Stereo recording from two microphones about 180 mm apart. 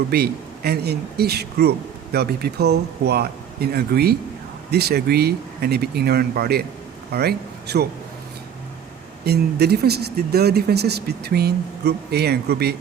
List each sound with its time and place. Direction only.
0.1 s speech: 60° right (ahead or behind)
9.2 s speech: 65° right (ahead or behind)